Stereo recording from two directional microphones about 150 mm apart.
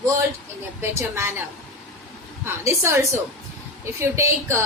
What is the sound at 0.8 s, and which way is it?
Speech, 15° right (ahead or behind).